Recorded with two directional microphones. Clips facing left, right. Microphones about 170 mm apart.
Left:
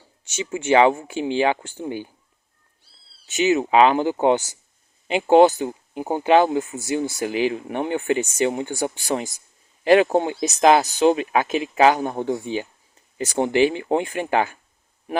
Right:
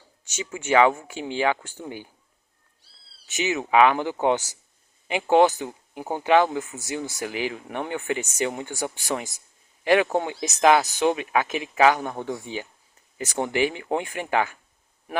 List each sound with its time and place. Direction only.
0.3 s speech: 25° left (ahead or behind)
3.3 s speech: 30° left (ahead or behind)